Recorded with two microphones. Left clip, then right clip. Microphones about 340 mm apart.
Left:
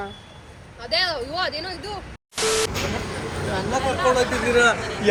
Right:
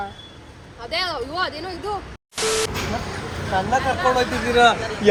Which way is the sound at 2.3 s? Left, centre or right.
Centre.